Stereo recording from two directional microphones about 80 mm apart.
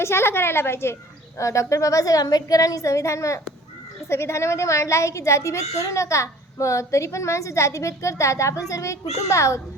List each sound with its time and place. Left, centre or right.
0.0 s a child's voice: left